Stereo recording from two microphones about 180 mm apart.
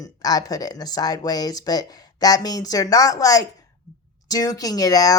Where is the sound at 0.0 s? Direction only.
20° left (ahead or behind).